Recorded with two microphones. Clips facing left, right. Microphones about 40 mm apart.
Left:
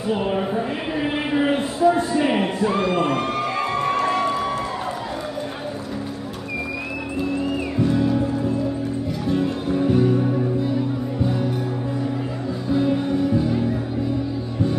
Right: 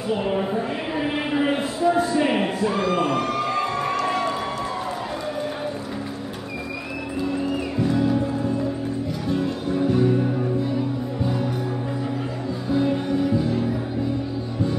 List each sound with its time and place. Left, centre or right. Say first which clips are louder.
0.1 s a sound: left 1 dB; centre
2.7 s speech: left 1 dB; left
4.0 s crowd: left 3 dB; centre
7.9 s music: even; centre
9.3 s music: left 2 dB; centre
12.7 s music: left 1 dB; centre